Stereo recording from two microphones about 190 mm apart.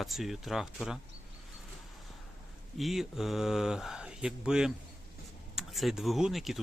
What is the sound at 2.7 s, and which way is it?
Speech, centre (ahead or behind).